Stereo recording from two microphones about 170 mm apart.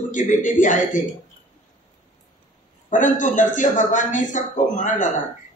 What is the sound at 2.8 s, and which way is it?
A man's voice, 50° left (ahead or behind).